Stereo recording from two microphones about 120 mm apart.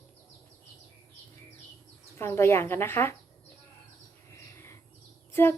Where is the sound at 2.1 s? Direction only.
20° left (ahead or behind).